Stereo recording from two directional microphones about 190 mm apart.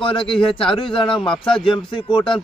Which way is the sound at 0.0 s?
25° left (ahead or behind).